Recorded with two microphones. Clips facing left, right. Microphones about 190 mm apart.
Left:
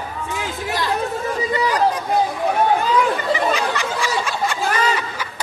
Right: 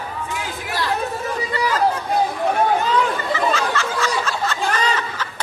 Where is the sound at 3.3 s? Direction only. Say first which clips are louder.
Even; 15° left (ahead or behind).